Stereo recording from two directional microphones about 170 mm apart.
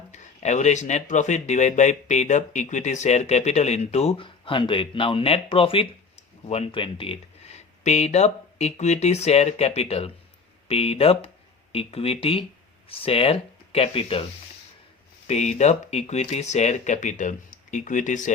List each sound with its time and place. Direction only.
0.1 s speech: 45° left (ahead or behind)
15.3 s speech: 40° left (ahead or behind)